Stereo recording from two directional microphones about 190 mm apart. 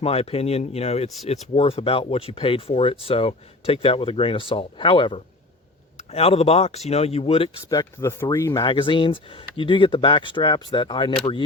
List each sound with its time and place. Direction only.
0.0 s speech: 30° left (ahead or behind)
7.6 s speech: 15° left (ahead or behind)
8.6 s speech: 25° left (ahead or behind)